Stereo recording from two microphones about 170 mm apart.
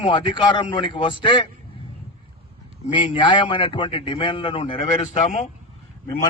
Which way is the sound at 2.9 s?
30° left (ahead or behind).